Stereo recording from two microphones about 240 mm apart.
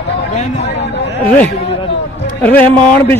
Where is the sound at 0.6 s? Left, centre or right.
Left.